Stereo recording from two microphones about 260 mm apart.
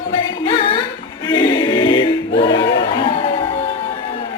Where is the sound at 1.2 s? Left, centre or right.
Centre.